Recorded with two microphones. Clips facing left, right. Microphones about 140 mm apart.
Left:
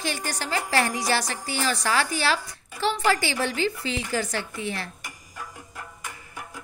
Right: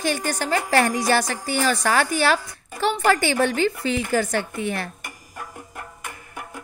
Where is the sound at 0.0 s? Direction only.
50° right (ahead or behind).